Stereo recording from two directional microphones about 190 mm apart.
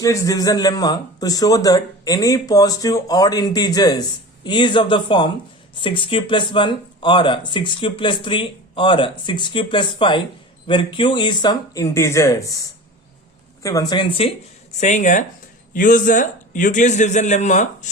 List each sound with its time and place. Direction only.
0.0 s speech: 15° left (ahead or behind)
14.8 s a man's voice: 40° left (ahead or behind)